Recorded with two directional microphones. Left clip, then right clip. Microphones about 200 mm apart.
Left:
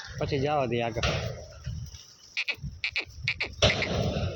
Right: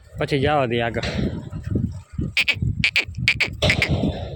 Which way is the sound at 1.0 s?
45° right (ahead or behind).